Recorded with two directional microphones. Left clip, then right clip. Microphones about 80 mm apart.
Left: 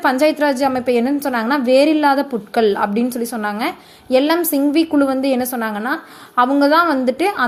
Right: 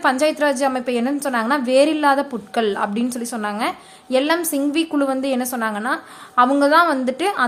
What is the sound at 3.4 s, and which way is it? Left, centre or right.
A woman's voice, left.